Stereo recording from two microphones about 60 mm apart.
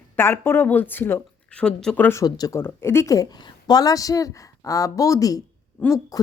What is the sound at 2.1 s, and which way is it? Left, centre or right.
Speech, left.